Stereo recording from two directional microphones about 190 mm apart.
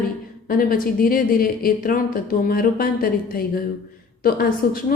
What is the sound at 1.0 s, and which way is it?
A woman's voice, 50° left (ahead or behind).